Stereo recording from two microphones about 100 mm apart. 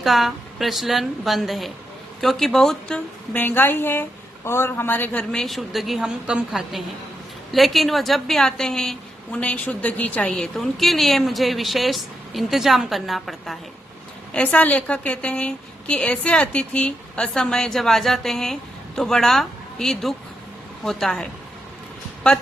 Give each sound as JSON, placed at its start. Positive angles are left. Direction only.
{"t": 0.0, "sound": "a woman's voice", "side_deg": 0}
{"t": 3.3, "sound": "a man's voice", "side_deg": 20}
{"t": 5.3, "sound": "a woman's voice", "side_deg": 5}
{"t": 14.3, "sound": "a woman's voice", "side_deg": 15}